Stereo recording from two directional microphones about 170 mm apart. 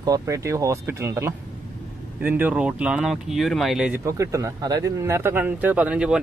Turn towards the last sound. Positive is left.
turn(degrees=-5)  # may be behind; listen again after turning